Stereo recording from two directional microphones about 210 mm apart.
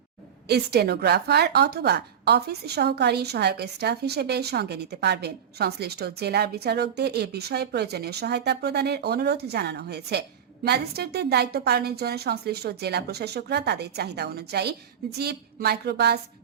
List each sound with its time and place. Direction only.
0.4 s a woman's voice: 50° right (ahead or behind)